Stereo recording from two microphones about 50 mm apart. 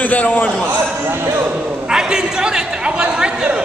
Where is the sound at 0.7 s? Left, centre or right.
Right.